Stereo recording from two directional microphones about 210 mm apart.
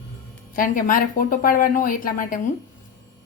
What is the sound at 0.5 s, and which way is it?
A woman's voice, 40° left (ahead or behind).